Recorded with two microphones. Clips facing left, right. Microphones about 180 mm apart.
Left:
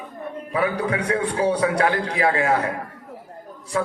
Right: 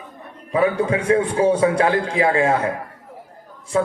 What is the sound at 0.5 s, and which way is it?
A man's voice, 25° right (ahead or behind).